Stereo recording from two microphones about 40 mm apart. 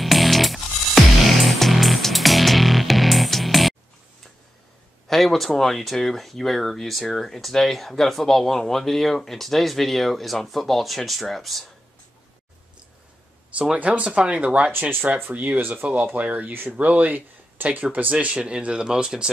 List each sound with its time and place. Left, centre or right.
0.0 s music: centre
5.0 s speech: centre
13.7 s speech: right
14.7 s speech: right
15.3 s speech: right
18.1 s speech: right
18.4 s speech: right